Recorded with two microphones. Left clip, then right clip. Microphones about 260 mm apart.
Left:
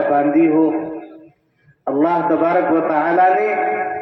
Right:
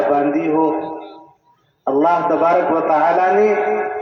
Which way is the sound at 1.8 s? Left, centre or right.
Right.